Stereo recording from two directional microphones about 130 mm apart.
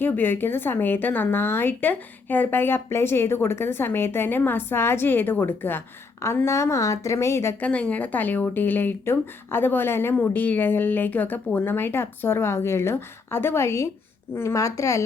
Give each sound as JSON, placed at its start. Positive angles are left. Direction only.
{"t": 0.0, "sound": "a woman's voice", "side_deg": 15}
{"t": 7.7, "sound": "a woman's voice", "side_deg": 10}